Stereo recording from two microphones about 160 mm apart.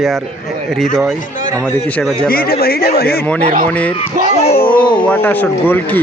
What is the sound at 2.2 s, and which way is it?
Speech, 70° left (ahead or behind).